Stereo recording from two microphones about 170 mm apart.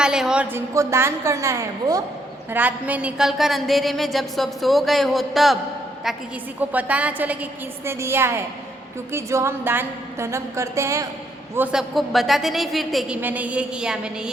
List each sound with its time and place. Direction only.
0.0 s a woman's voice: 5° right (ahead or behind)
0.7 s a woman's voice: 15° right (ahead or behind); by 5.5 s centre (ahead or behind)
6.6 s a woman's voice: 10° right (ahead or behind)
11.5 s a woman's voice: 5° right (ahead or behind)